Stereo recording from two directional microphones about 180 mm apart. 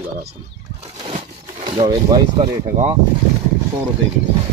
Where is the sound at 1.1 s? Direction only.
35° right (ahead or behind).